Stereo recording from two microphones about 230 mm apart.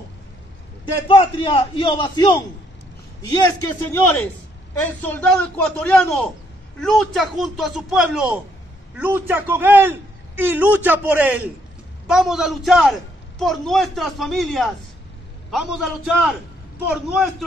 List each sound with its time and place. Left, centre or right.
1.0 s a man's voice: left
3.6 s a man's voice: centre